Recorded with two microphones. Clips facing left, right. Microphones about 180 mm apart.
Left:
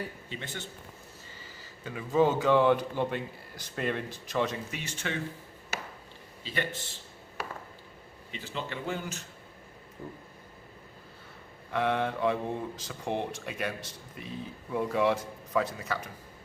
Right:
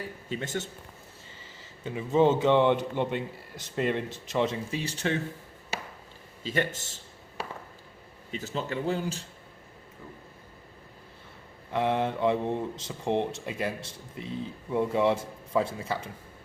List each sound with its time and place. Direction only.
0.3 s speech: 45° right (ahead or behind)
1.4 s speech: 25° right (ahead or behind)
5.7 s chop: 30° right (ahead or behind)
6.4 s speech: 45° right (ahead or behind)
8.3 s speech: 40° right (ahead or behind)
11.7 s speech: 25° right (ahead or behind)